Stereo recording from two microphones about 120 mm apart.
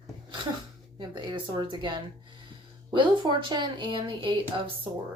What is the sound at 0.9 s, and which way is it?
Speech, 40° right (ahead or behind).